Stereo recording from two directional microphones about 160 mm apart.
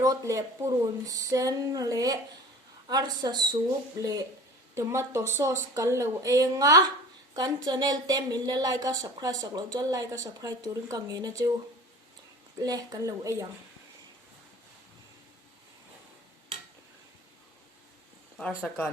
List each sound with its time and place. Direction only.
0.0 s a woman's voice: 20° right (ahead or behind)
12.5 s a woman's voice: 25° right (ahead or behind)
18.3 s speech: 5° left (ahead or behind)